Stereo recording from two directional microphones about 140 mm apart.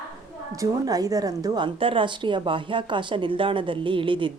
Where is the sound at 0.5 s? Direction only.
25° right (ahead or behind).